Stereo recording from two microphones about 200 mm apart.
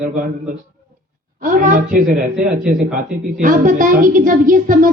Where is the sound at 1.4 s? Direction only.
45° right (ahead or behind).